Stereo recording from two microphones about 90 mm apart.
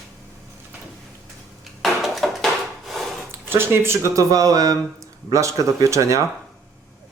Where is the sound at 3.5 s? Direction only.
25° right (ahead or behind).